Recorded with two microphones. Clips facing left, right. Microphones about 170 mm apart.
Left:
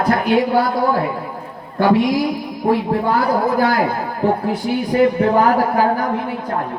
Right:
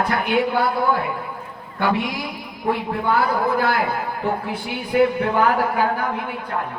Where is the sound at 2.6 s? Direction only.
40° left (ahead or behind).